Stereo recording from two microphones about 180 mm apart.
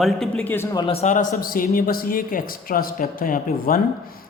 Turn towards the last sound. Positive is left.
turn(degrees=50)  # may be behind; listen again after turning